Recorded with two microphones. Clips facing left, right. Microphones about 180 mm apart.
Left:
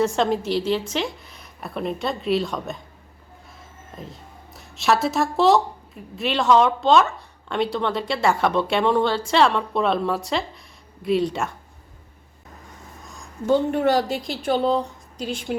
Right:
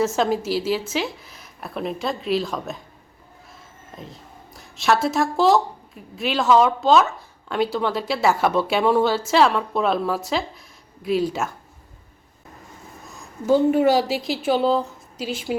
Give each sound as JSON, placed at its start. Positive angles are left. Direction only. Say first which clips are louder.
{"t": 0.0, "sound": "speech", "louder": "even", "side_deg": -5}
{"t": 3.9, "sound": "speech", "louder": "left 1 dB", "side_deg": 0}
{"t": 13.1, "sound": "a woman's voice", "louder": "right 1 dB", "side_deg": -5}